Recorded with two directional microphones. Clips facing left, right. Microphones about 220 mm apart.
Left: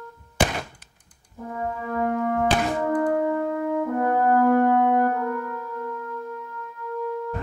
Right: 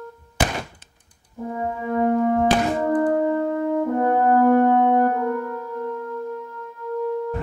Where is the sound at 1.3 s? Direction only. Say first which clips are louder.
Right 3 dB; 20° right (ahead or behind).